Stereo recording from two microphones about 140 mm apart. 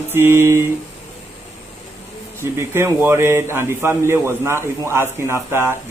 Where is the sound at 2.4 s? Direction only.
20° right (ahead or behind).